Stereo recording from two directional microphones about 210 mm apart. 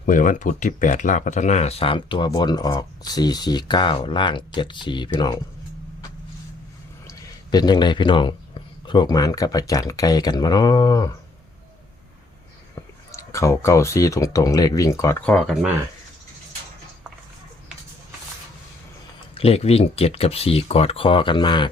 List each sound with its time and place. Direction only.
0.0 s speech: 40° left (ahead or behind); by 5.4 s 20° left (ahead or behind)
7.1 s a man's voice: 20° left (ahead or behind)
13.1 s speech: 15° left (ahead or behind)
19.3 s speech: 30° left (ahead or behind)